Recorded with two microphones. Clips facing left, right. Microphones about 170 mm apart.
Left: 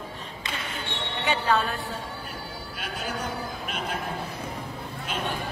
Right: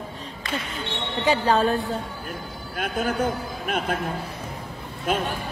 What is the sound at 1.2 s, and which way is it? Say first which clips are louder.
Speech: right 5 dB; 35° right (ahead or behind).